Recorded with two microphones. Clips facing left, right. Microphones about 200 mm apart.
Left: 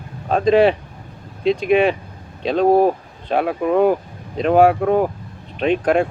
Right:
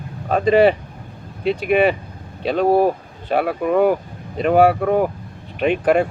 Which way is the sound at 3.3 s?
5° right (ahead or behind).